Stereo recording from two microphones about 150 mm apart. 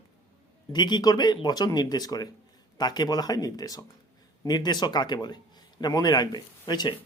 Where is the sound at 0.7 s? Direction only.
30° left (ahead or behind).